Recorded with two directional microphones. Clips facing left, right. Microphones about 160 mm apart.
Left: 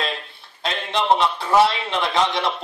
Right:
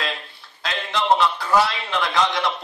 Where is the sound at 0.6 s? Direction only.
25° left (ahead or behind).